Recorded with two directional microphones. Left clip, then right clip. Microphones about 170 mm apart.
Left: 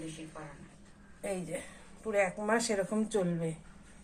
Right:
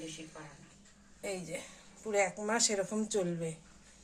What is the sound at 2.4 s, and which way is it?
Speech, 10° right (ahead or behind).